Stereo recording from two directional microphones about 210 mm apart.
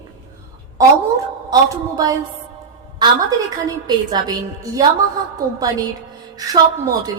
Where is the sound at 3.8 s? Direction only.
20° right (ahead or behind).